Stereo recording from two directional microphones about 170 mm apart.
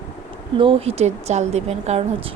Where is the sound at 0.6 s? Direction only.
35° right (ahead or behind).